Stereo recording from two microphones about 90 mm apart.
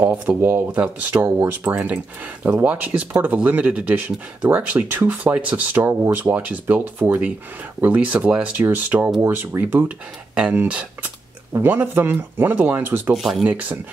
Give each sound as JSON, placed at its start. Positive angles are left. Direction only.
{"t": 0.0, "sound": "speech", "side_deg": -20}
{"t": 13.1, "sound": "speech", "side_deg": -5}
{"t": 13.4, "sound": "speech", "side_deg": -15}